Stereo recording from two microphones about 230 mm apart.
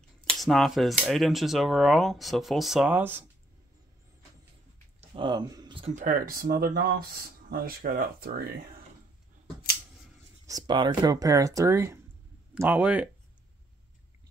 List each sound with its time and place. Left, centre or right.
0.3 s speech: centre
5.1 s speech: right
10.4 s speech: centre